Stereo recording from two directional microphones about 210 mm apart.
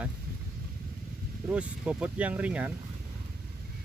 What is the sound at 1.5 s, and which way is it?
Speech, 5° right (ahead or behind).